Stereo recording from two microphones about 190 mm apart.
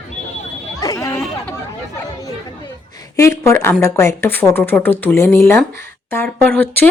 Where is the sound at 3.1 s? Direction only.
15° left (ahead or behind).